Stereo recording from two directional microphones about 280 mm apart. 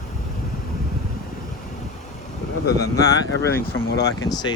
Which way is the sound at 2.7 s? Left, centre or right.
Centre.